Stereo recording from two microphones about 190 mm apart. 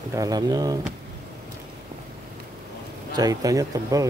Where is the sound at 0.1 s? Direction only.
20° right (ahead or behind).